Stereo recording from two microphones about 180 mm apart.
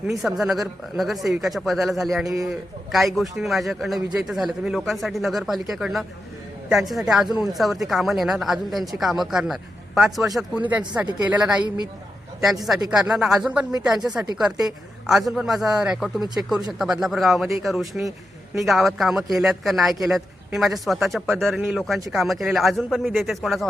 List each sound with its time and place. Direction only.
0.1 s speech: centre (ahead or behind)
2.2 s a man's voice: 20° right (ahead or behind)
2.9 s speech: centre (ahead or behind)
12.9 s a man's voice: 5° right (ahead or behind)